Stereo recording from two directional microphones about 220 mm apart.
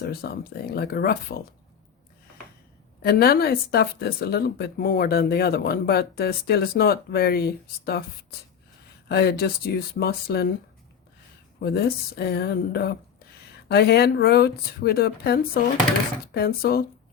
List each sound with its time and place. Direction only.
0.0 s speech: 45° left (ahead or behind)
3.0 s speech: 45° left (ahead or behind)
9.0 s speech: 45° left (ahead or behind)
11.6 s speech: 45° left (ahead or behind)